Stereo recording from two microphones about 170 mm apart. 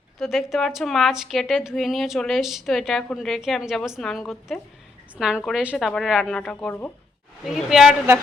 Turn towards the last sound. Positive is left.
turn(degrees=0)  # may be behind; listen again after turning